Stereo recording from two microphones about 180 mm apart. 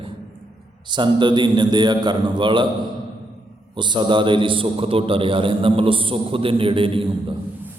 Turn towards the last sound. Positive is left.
turn(degrees=-30)  # may be behind; listen again after turning